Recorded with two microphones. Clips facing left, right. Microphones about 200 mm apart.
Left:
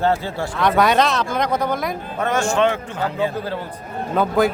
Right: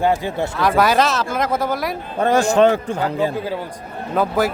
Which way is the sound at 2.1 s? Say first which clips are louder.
Right 5 dB; 35° right (ahead or behind).